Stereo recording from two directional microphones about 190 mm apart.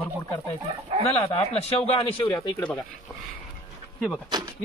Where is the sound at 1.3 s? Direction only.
35° left (ahead or behind).